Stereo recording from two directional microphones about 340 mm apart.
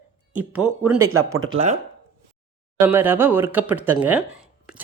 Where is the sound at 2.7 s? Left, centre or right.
Centre.